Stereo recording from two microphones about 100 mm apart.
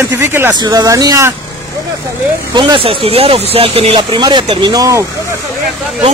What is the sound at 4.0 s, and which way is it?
Speech, 45° right (ahead or behind).